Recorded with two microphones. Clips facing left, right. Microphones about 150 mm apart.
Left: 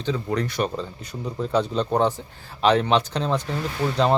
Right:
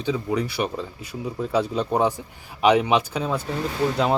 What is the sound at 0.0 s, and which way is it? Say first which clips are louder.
Speech: right 1 dB; 10° right (ahead or behind).